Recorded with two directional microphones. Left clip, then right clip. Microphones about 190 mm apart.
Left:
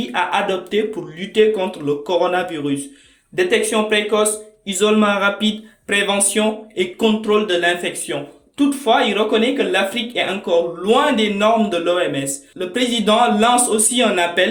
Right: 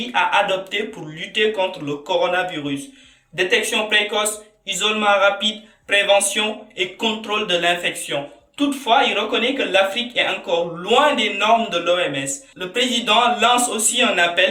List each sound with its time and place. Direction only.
0.1 s speech: 50° left (ahead or behind)